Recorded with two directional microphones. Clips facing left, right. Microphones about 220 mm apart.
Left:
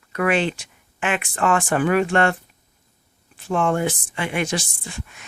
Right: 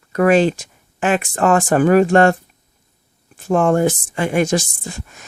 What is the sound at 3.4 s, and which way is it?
Speech, 45° right (ahead or behind).